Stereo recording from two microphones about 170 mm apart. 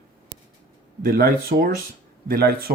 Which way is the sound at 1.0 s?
60° right (ahead or behind).